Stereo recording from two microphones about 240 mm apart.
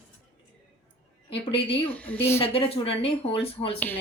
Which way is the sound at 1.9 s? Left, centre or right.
Centre.